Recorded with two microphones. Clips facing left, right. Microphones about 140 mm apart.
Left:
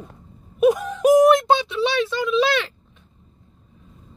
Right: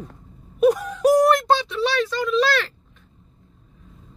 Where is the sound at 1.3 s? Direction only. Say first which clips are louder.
Left 2 dB; 20° left (ahead or behind).